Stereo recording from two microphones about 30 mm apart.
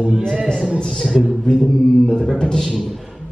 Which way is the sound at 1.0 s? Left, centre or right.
Centre.